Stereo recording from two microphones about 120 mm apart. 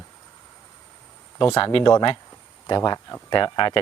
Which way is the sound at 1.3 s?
40° left (ahead or behind).